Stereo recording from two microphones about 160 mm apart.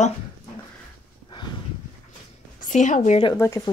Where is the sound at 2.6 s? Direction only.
50° left (ahead or behind).